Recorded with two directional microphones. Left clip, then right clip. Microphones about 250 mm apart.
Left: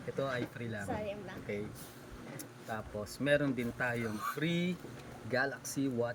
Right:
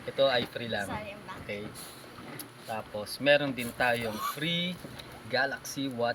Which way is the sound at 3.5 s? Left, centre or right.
Right.